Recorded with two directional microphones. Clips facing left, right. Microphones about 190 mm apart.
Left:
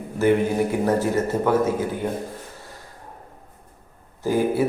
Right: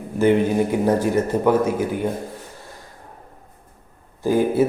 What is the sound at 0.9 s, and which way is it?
Speech, 15° right (ahead or behind).